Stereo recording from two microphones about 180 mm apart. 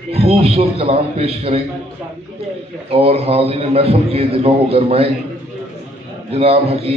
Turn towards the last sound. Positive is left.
turn(degrees=-35)  # may be behind; listen again after turning